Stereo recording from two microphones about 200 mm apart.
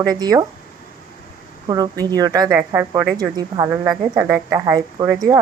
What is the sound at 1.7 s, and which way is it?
A woman's voice, 20° right (ahead or behind).